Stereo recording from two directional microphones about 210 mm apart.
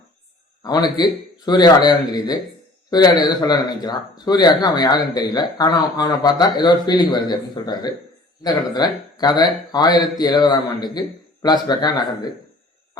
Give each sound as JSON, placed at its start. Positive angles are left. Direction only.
{"t": 0.6, "sound": "speech", "side_deg": 20}